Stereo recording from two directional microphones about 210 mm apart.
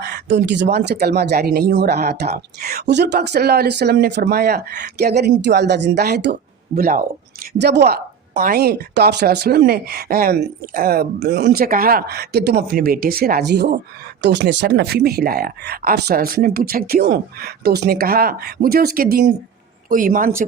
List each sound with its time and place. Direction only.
0.0 s speech: 55° right (ahead or behind)